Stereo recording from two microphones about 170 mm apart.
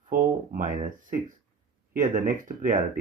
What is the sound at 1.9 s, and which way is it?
Speech, 50° right (ahead or behind).